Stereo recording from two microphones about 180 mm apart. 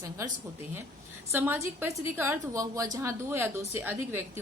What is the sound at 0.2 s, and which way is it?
A woman's voice, 15° right (ahead or behind).